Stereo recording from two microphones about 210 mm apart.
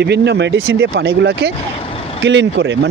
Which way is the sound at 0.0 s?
55° right (ahead or behind).